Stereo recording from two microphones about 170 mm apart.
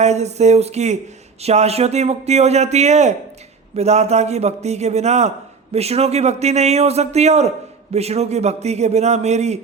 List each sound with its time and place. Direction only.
0.0 s speech: 40° right (ahead or behind)